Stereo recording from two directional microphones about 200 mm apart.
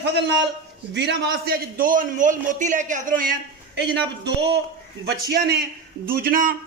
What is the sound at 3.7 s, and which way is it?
A man's voice, 55° right (ahead or behind).